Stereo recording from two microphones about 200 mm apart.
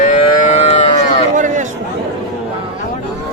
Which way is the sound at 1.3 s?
40° right (ahead or behind).